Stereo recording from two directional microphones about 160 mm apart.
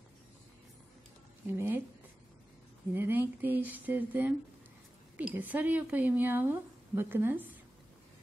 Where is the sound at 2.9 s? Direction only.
10° right (ahead or behind).